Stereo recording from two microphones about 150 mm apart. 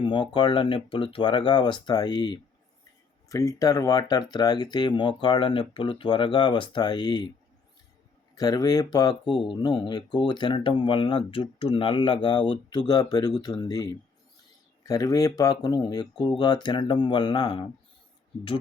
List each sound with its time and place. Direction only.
0.0 s speech: 30° left (ahead or behind)
8.4 s speech: 25° left (ahead or behind)
14.8 s speech: 20° left (ahead or behind)